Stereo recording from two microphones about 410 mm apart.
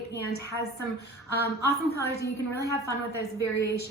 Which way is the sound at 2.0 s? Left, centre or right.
Centre.